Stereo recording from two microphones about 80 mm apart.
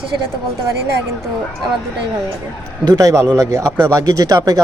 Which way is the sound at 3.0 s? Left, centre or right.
Right.